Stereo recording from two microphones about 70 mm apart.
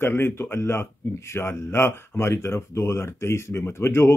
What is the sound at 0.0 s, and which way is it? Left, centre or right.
Speech, left.